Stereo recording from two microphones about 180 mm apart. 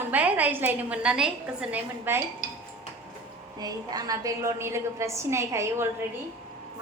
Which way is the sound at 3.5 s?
20° right (ahead or behind).